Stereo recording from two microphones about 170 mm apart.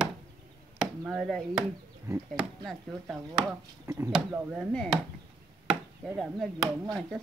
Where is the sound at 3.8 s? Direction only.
20° right (ahead or behind).